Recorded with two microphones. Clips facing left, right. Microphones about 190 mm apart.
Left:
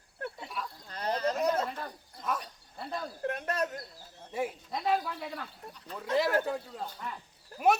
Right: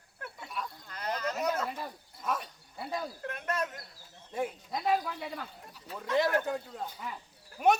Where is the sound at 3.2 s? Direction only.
35° left (ahead or behind).